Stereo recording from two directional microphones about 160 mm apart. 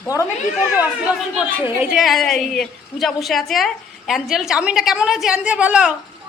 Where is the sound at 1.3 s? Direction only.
5° right (ahead or behind).